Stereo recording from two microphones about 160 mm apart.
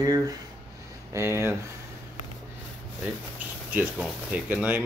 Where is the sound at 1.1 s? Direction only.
15° right (ahead or behind).